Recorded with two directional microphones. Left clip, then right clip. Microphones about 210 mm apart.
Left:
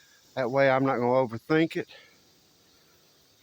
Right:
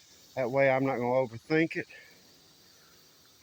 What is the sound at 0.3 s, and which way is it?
Speech, 25° left (ahead or behind).